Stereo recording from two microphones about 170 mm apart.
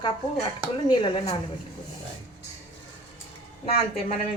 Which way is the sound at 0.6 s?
25° left (ahead or behind).